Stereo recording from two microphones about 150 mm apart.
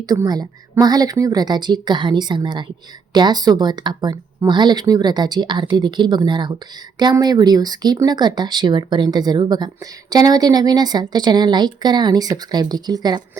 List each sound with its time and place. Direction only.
0.0 s speech: 25° right (ahead or behind)